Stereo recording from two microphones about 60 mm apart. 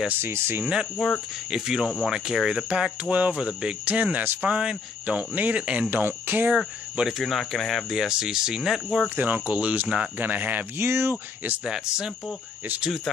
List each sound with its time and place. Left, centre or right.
0.2 s speech: right
1.0 s speech: centre
2.7 s speech: right
7.1 s speech: centre
7.9 s speech: centre
9.1 s speech: right
10.8 s speech: right
11.6 s speech: centre